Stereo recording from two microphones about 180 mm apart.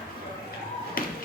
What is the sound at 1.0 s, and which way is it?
Music, 55° left (ahead or behind).